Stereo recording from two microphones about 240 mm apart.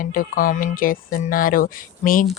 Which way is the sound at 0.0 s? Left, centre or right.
Left.